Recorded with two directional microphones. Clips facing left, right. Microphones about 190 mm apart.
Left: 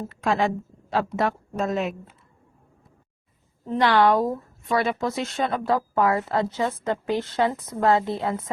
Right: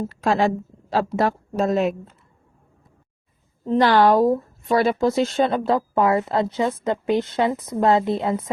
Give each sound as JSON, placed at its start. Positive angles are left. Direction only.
{"t": 0.1, "sound": "a woman's voice", "side_deg": -35}
{"t": 3.7, "sound": "a woman's voice", "side_deg": -35}